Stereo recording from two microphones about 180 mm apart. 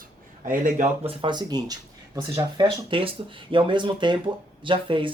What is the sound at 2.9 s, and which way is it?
Speech, 30° right (ahead or behind).